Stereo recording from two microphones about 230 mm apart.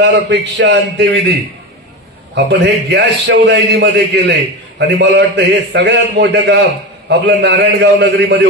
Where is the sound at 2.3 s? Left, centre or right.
Right.